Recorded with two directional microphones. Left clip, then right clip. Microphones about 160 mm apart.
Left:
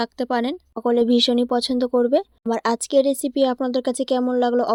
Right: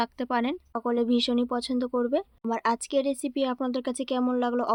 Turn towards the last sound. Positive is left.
turn(degrees=30)  # may be behind; listen again after turning